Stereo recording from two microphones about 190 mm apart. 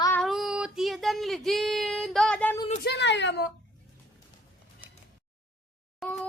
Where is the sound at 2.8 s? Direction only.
65° left (ahead or behind).